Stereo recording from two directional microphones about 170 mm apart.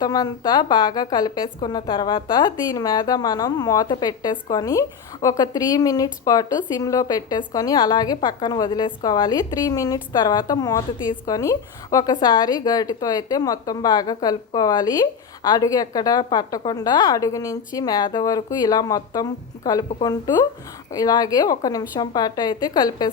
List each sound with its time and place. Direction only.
0.0 s a woman's voice: 20° left (ahead or behind)